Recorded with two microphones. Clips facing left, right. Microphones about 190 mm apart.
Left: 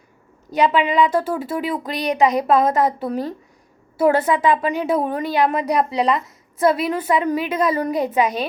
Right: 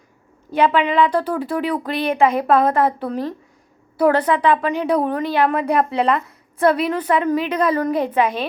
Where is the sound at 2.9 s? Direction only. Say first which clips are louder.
Even; 15° left (ahead or behind).